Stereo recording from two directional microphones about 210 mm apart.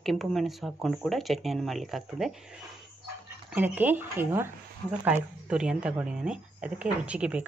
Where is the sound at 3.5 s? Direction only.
10° right (ahead or behind).